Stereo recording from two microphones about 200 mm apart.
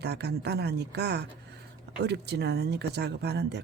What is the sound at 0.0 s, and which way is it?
Speech, 55° right (ahead or behind).